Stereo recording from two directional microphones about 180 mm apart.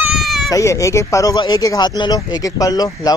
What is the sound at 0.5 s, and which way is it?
Speech, 15° left (ahead or behind).